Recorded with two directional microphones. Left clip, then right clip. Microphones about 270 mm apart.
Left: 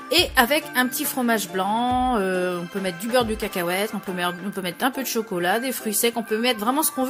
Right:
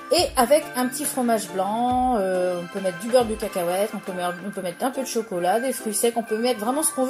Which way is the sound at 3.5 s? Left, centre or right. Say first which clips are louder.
Right 2 dB; left.